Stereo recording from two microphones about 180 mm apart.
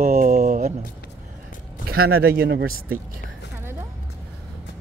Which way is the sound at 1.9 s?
55° right (ahead or behind).